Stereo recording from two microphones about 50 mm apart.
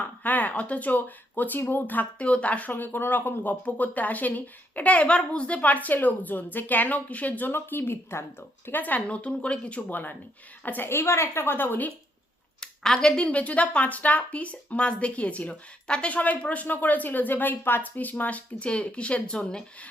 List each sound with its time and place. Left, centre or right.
0.2 s a woman's voice: left
2.1 s speech: left
2.7 s speech: left
3.5 s a woman's voice: left
7.5 s a woman's voice: left
9.9 s a woman's voice: left
10.8 s a woman's voice: left
12.5 s a sound: centre
13.2 s speech: left